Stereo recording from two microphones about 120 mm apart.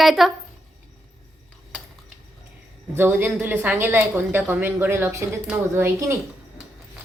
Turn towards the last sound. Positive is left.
turn(degrees=-20)  # may be behind; listen again after turning